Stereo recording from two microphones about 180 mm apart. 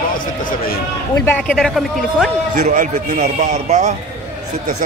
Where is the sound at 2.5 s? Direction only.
45° right (ahead or behind).